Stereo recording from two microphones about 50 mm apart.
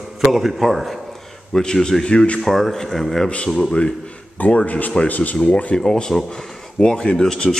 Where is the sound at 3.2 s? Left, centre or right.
Left.